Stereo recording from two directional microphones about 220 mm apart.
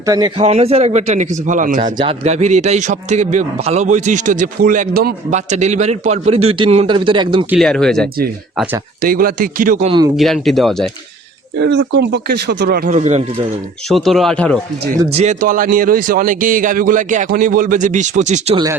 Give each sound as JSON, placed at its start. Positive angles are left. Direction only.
{"t": 0.0, "sound": "a man's voice", "side_deg": -15}
{"t": 1.8, "sound": "speech", "side_deg": -20}
{"t": 7.5, "sound": "speech", "side_deg": 0}
{"t": 9.0, "sound": "speech", "side_deg": -40}
{"t": 10.2, "sound": "speech", "side_deg": 0}
{"t": 11.6, "sound": "speech", "side_deg": -50}
{"t": 13.0, "sound": "a man's voice", "side_deg": -30}
{"t": 13.8, "sound": "speech", "side_deg": 0}
{"t": 15.1, "sound": "speech", "side_deg": -30}